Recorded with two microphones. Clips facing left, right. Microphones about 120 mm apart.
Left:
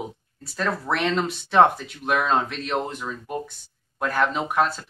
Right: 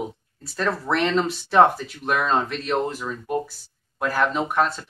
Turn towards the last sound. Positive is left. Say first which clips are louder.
# right 1 dB
turn(degrees=0)  # may be behind; listen again after turning